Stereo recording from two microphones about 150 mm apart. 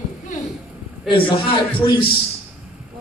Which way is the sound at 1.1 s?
35° left (ahead or behind).